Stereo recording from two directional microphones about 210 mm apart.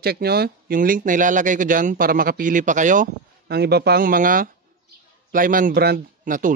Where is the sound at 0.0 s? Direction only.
50° right (ahead or behind).